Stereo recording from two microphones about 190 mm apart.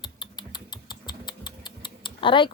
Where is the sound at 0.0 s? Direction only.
25° left (ahead or behind).